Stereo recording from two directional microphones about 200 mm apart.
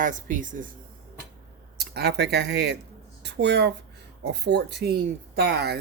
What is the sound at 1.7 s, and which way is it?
Speech, 55° right (ahead or behind).